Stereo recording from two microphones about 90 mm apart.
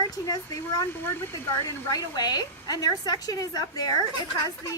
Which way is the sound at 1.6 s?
40° left (ahead or behind).